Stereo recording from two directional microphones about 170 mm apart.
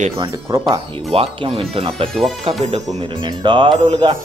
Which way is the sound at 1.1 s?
35° right (ahead or behind).